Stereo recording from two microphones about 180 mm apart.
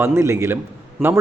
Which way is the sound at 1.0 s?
Centre (ahead or behind).